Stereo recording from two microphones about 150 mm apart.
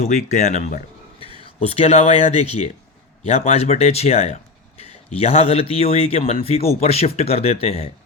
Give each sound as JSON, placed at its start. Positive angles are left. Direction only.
{"t": 0.0, "sound": "a man's voice", "side_deg": 50}
{"t": 1.5, "sound": "a man's voice", "side_deg": 40}